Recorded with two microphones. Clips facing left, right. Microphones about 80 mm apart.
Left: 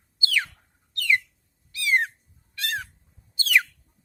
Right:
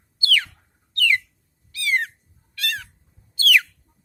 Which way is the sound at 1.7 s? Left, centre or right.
Left.